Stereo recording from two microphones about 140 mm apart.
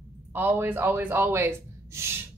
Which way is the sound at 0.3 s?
15° right (ahead or behind).